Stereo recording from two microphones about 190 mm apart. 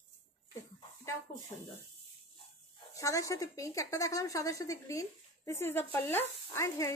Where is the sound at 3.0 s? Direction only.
15° left (ahead or behind).